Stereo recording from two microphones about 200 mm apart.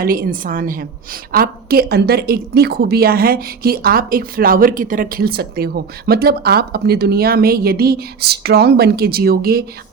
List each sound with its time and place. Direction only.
0.0 s a woman's voice: 45° right (ahead or behind)